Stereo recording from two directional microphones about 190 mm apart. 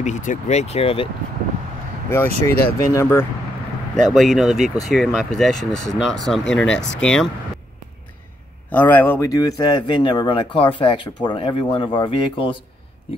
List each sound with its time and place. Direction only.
0.0 s speech: 40° left (ahead or behind)
2.0 s speech: 15° left (ahead or behind)
4.1 s speech: centre (ahead or behind)
8.7 s speech: 10° left (ahead or behind); by 12.5 s 25° left (ahead or behind)